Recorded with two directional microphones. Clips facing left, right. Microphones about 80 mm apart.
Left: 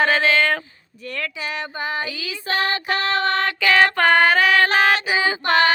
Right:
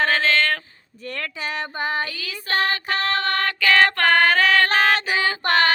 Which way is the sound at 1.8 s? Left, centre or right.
Right.